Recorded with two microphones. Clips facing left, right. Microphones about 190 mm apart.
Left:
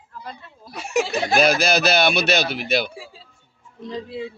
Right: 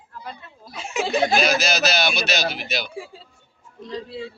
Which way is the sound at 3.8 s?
20° left (ahead or behind).